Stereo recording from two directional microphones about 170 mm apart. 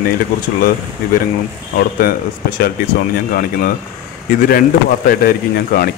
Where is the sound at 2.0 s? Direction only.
60° left (ahead or behind).